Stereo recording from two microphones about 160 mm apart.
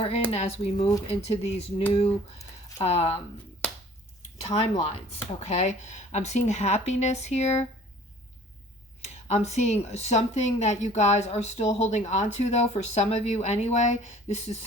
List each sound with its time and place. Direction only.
0.3 s speech: 40° left (ahead or behind)
4.4 s a woman's voice: 40° left (ahead or behind)
9.2 s a woman's voice: 45° left (ahead or behind)